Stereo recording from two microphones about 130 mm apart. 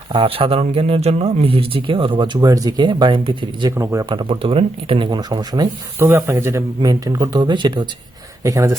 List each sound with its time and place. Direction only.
0.1 s speech: 45° right (ahead or behind)
3.7 s speech: 20° right (ahead or behind)
4.1 s speech: 45° right (ahead or behind)
6.0 s speech: 20° right (ahead or behind); by 7.9 s 35° right (ahead or behind)
8.4 s speech: 25° right (ahead or behind)